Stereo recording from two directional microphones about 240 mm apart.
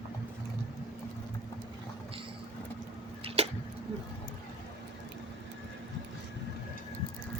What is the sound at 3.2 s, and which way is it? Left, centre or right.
Tick-tock, right.